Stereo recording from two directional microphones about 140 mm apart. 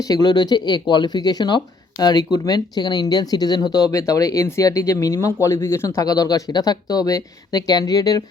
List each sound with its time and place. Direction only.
0.0 s speech: 30° left (ahead or behind)